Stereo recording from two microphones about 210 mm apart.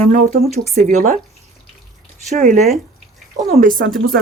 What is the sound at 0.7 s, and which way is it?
Speech, 35° right (ahead or behind).